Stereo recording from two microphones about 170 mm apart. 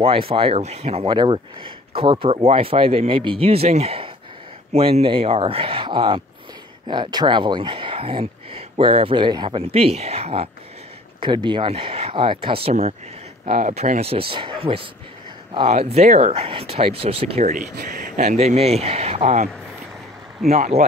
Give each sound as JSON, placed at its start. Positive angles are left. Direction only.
{"t": 0.0, "sound": "speech", "side_deg": -35}
{"t": 13.5, "sound": "speech", "side_deg": -50}